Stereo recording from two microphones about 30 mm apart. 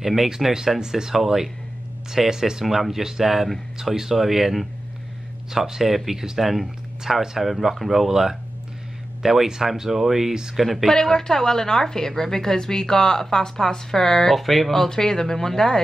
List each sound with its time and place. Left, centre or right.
0.0 s speech: centre
2.6 s speech: centre
8.1 s speech: centre
10.9 s a woman's voice: centre
14.3 s speech: centre
14.7 s a woman's voice: centre